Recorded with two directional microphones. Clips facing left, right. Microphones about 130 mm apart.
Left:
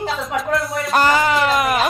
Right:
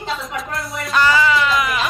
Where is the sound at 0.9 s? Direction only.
45° left (ahead or behind).